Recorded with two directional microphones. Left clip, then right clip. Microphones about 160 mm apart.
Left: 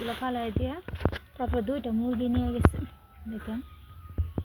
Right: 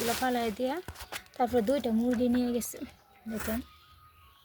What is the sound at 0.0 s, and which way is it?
Speech, 35° right (ahead or behind).